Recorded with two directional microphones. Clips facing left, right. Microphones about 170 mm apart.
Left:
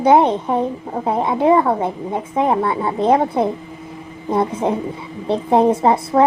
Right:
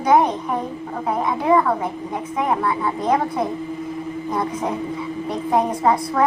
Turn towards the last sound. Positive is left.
turn(degrees=30)  # may be behind; listen again after turning